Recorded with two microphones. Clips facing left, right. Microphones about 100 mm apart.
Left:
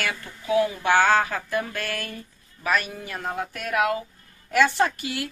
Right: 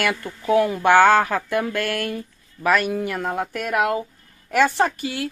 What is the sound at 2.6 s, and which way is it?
Speech, 70° right (ahead or behind).